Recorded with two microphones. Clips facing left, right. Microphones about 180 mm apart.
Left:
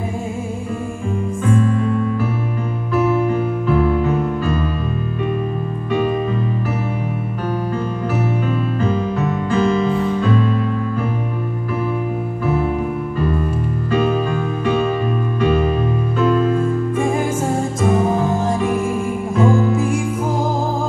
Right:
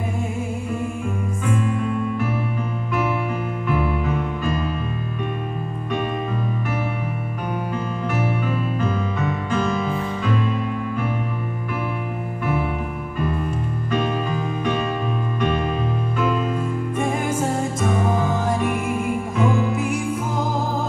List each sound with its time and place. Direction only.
19.3 s music: 30° left (ahead or behind)